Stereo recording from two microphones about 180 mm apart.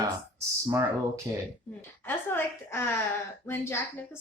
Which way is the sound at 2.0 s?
15° left (ahead or behind).